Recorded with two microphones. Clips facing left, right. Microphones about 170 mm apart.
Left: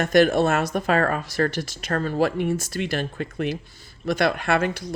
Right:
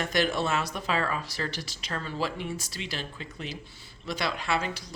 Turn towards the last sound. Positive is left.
turn(degrees=55)  # may be behind; listen again after turning